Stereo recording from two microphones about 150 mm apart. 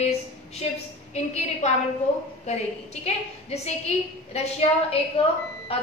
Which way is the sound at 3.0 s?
45° left (ahead or behind).